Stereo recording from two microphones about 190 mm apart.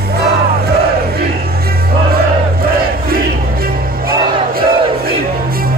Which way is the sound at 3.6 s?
50° right (ahead or behind).